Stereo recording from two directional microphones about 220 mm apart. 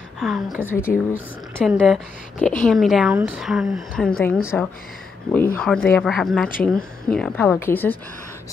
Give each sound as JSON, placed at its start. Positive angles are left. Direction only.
{"t": 0.2, "sound": "speech", "side_deg": 0}
{"t": 0.9, "sound": "speech", "side_deg": 45}
{"t": 1.6, "sound": "a woman's voice", "side_deg": 0}